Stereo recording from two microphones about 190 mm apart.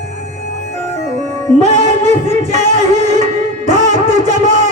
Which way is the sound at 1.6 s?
35° right (ahead or behind).